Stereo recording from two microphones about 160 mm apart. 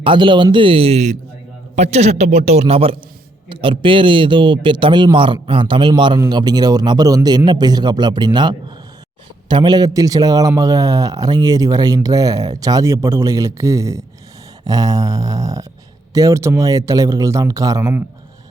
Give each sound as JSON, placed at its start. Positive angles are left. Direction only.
{"t": 0.0, "sound": "a man's voice", "side_deg": -30}